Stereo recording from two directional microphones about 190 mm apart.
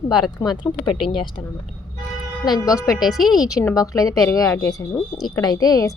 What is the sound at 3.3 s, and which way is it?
A woman's voice, 20° left (ahead or behind).